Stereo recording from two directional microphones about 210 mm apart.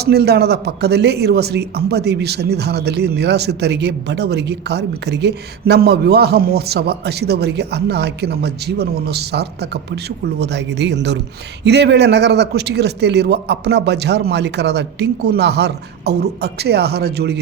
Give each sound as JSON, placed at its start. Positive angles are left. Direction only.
{"t": 0.0, "sound": "a man's voice", "side_deg": -50}